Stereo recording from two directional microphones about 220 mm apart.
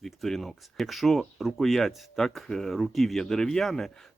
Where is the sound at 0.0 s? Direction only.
Centre (ahead or behind).